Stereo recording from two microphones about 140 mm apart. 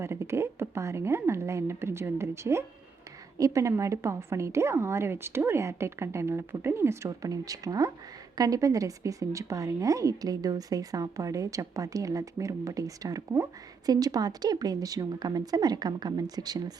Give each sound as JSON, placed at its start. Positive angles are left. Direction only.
{"t": 0.0, "sound": "a woman's voice", "side_deg": -20}